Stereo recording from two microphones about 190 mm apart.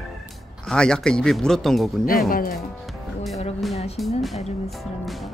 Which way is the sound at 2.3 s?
50° left (ahead or behind).